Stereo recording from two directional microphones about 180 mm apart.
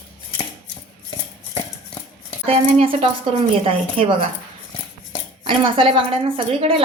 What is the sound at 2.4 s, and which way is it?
A woman's voice, 30° right (ahead or behind).